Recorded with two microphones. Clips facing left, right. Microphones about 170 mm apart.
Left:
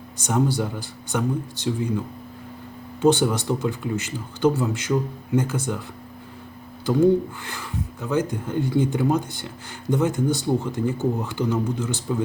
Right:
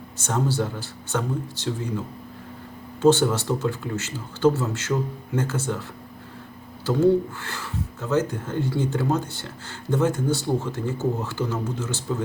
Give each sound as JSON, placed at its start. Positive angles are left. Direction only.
{"t": 0.2, "sound": "speech", "side_deg": 15}
{"t": 3.0, "sound": "speech", "side_deg": 15}
{"t": 6.8, "sound": "speech", "side_deg": 15}